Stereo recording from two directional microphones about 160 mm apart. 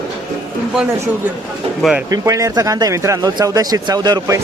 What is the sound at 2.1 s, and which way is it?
Speech, 20° right (ahead or behind).